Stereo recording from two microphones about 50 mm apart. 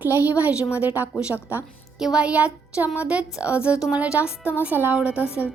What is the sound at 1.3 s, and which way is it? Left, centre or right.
Speech, right.